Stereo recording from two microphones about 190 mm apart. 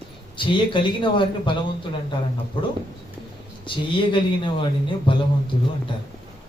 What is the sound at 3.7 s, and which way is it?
Speech, 25° left (ahead or behind).